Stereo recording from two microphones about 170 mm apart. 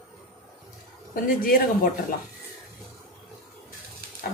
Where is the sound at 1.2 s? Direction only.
60° left (ahead or behind).